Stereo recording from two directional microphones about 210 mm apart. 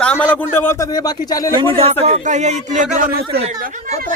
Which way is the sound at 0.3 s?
10° left (ahead or behind).